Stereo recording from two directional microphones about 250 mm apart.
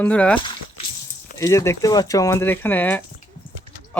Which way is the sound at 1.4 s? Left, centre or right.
Centre.